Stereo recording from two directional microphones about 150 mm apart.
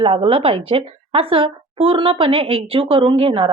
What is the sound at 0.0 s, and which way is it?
A woman's voice, 35° right (ahead or behind).